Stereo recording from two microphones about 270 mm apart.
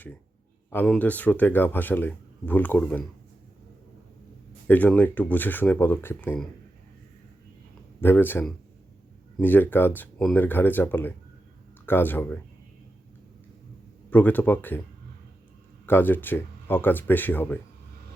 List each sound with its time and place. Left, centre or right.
0.7 s speech: centre
4.7 s speech: centre
8.0 s speech: centre
14.1 s speech: centre
15.9 s speech: centre